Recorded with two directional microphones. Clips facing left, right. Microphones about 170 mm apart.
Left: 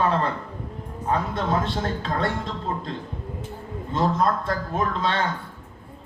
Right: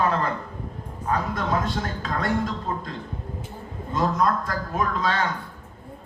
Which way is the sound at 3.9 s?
30° left (ahead or behind).